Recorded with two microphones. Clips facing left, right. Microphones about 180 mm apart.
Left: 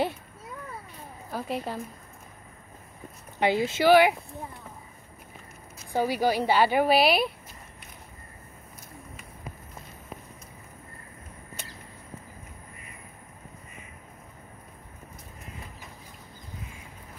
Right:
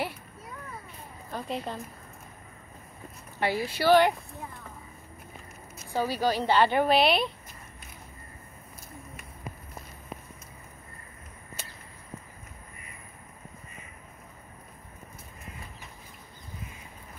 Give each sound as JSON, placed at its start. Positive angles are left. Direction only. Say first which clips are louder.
{"t": 1.3, "sound": "a woman's voice", "louder": "left 2 dB", "side_deg": 5}
{"t": 3.3, "sound": "speech", "louder": "left 4 dB", "side_deg": 20}
{"t": 3.9, "sound": "a woman's voice", "louder": "left 1 dB", "side_deg": 10}
{"t": 5.9, "sound": "a woman's voice", "louder": "left 2 dB", "side_deg": 15}